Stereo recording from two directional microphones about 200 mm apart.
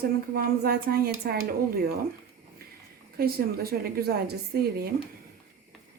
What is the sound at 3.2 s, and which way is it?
A woman's voice, 50° right (ahead or behind).